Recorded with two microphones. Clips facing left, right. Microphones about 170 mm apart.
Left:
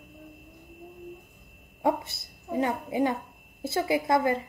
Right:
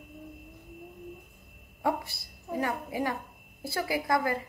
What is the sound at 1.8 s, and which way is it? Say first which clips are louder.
A child's voice: left 3 dB; 25° left (ahead or behind).